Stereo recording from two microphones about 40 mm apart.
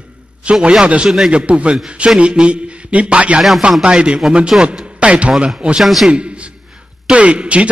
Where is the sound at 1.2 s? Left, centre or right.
Right.